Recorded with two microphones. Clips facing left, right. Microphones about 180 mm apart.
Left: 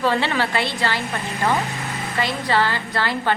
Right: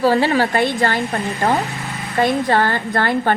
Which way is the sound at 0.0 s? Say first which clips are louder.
Right 6 dB; 40° right (ahead or behind).